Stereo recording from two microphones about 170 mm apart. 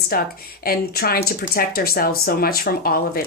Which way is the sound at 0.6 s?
65° left (ahead or behind).